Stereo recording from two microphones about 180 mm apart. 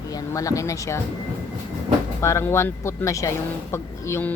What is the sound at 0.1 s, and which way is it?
Speech, 20° left (ahead or behind).